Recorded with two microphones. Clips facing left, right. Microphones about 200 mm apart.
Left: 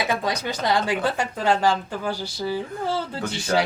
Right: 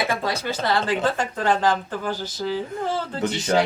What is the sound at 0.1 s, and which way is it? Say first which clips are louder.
Speech: even; 15° left (ahead or behind).